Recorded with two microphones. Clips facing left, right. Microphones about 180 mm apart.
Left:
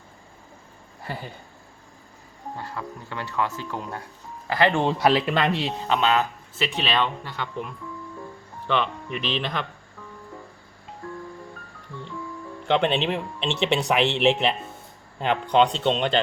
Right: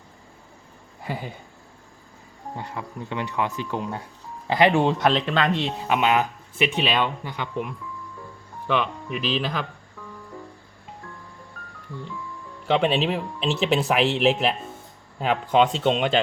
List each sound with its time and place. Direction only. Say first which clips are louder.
1.0 s speech: right 3 dB; 15° right (ahead or behind)
2.6 s speech: right 2 dB; 20° right (ahead or behind)
4.7 s speech: even; centre (ahead or behind)
5.9 s speech: right 1 dB; 15° right (ahead or behind)
12.6 s speech: right 1 dB; 5° right (ahead or behind)